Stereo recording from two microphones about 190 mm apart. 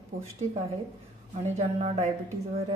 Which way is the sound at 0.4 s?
40° right (ahead or behind).